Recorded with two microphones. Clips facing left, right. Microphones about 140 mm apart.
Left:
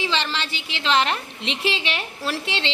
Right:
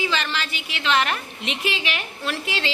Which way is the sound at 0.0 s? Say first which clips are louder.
Even; 30° left (ahead or behind).